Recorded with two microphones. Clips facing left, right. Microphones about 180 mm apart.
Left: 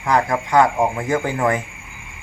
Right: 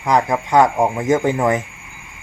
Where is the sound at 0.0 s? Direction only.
15° right (ahead or behind).